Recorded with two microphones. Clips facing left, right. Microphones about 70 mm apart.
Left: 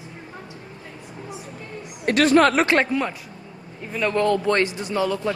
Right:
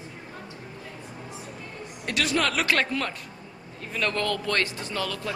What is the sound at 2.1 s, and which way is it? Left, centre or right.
Speech, left.